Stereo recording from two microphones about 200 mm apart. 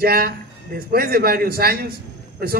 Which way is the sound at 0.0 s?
50° right (ahead or behind).